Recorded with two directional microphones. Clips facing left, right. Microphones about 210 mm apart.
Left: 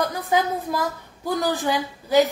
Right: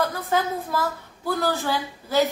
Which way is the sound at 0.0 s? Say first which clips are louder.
Left 2 dB; 15° left (ahead or behind).